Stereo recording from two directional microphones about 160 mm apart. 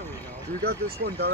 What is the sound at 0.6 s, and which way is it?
Speech, 75° right (ahead or behind).